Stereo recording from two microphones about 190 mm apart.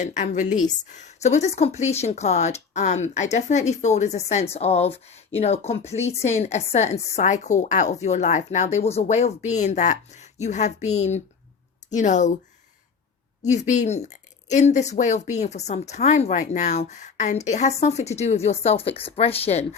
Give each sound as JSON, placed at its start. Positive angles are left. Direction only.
{"t": 0.0, "sound": "speech", "side_deg": 40}
{"t": 13.4, "sound": "speech", "side_deg": 40}